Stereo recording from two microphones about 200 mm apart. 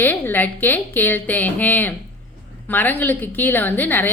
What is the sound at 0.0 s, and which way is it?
A woman's voice, 10° left (ahead or behind).